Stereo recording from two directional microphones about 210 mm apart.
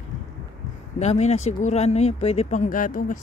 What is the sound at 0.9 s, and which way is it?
Speech, 30° left (ahead or behind).